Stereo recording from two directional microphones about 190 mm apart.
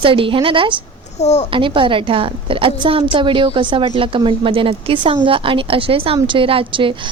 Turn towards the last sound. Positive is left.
turn(degrees=-25)  # may be behind; listen again after turning